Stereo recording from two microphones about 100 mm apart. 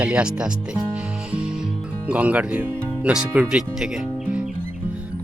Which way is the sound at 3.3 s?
15° right (ahead or behind).